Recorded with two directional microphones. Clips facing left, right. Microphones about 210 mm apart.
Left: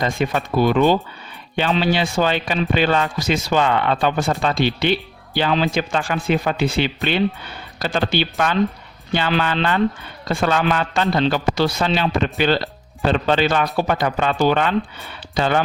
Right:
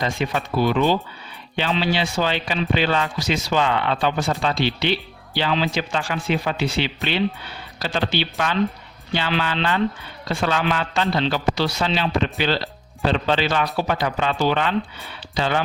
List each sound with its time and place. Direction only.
0.0 s speech: 50° left (ahead or behind)